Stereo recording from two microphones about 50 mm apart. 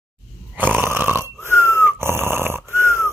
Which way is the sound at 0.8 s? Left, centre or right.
Right.